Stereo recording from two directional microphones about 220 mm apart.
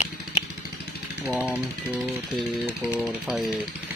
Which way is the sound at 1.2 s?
5° right (ahead or behind).